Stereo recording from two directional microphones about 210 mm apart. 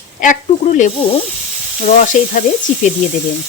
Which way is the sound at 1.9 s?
35° left (ahead or behind).